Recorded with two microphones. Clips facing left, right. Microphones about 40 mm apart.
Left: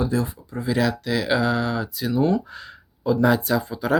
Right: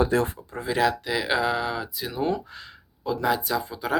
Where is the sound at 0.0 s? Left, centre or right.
Right.